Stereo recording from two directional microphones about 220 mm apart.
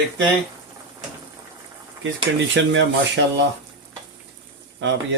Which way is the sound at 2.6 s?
55° right (ahead or behind).